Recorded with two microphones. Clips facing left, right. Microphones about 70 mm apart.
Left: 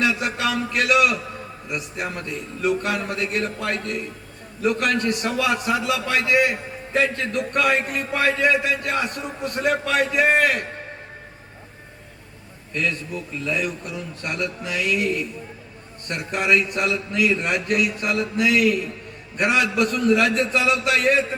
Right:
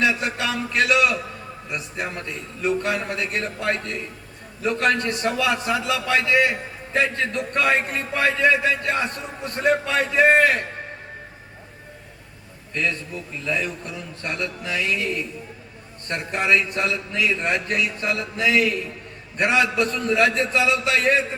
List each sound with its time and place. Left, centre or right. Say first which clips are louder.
0.1 s a man's voice: left 1 dB; right
12.7 s a man's voice: left 1 dB; right